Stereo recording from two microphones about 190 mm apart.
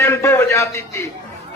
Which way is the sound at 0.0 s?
15° left (ahead or behind).